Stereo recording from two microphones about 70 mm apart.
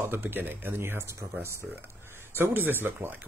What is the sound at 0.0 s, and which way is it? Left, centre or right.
Speech, right.